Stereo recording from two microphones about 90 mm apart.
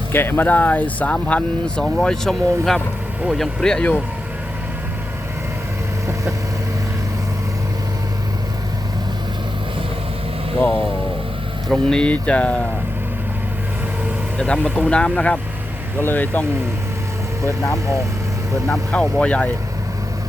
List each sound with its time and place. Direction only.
0.1 s speech: 25° left (ahead or behind)
11.7 s speech: 10° left (ahead or behind)
14.3 s speech: 10° left (ahead or behind)
18.7 s speech: 5° left (ahead or behind)